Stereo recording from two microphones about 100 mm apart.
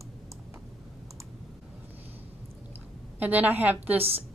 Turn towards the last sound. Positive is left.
turn(degrees=-20)  # may be behind; listen again after turning